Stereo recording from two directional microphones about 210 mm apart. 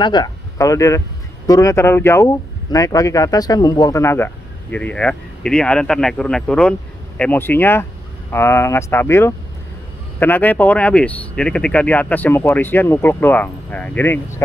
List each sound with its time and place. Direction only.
0.0 s speech: 20° left (ahead or behind)